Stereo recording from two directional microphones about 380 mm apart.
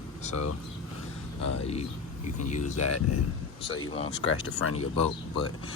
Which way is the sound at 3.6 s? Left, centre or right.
Centre.